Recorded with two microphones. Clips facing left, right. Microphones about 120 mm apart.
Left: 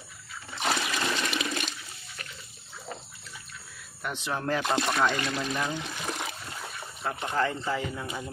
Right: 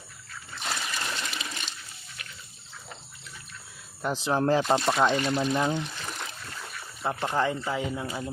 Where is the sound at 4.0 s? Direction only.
30° right (ahead or behind).